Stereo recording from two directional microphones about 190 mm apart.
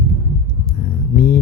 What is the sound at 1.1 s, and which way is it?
Speech, 50° left (ahead or behind).